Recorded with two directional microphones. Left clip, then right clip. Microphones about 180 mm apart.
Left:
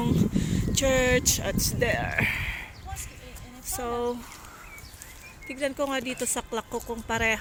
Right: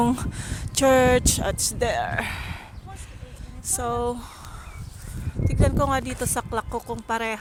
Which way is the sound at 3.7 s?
15° right (ahead or behind).